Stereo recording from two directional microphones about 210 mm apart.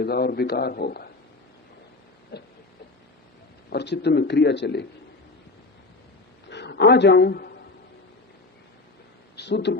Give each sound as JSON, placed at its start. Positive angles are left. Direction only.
{"t": 0.0, "sound": "a man's voice", "side_deg": 50}
{"t": 2.3, "sound": "a man's voice", "side_deg": 50}
{"t": 3.7, "sound": "a man's voice", "side_deg": 55}
{"t": 6.5, "sound": "a man's voice", "side_deg": 55}
{"t": 9.3, "sound": "speech", "side_deg": 50}